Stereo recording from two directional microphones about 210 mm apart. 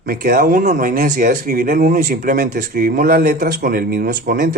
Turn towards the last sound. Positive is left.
turn(degrees=-45)  # may be behind; listen again after turning